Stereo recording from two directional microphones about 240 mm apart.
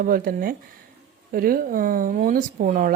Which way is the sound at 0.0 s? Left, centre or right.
Right.